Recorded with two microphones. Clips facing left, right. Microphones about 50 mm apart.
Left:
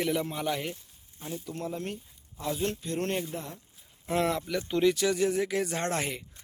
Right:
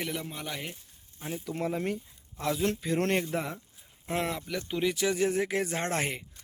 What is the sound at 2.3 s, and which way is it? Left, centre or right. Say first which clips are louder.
Speech: right 2 dB; right.